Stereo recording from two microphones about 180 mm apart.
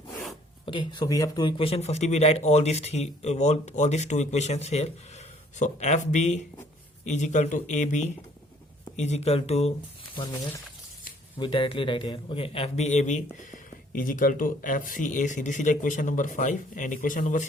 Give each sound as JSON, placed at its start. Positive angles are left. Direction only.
{"t": 0.6, "sound": "speech", "side_deg": 25}
{"t": 11.3, "sound": "a man's voice", "side_deg": 25}